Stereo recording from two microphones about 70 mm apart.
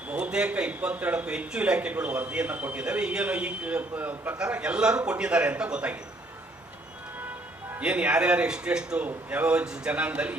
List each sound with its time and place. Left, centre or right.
0.1 s a man's voice: centre
7.8 s a man's voice: centre